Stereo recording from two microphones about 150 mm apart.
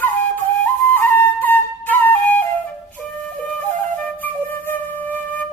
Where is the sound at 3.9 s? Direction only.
10° left (ahead or behind).